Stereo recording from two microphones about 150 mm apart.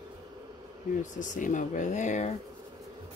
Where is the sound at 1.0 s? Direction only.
55° left (ahead or behind).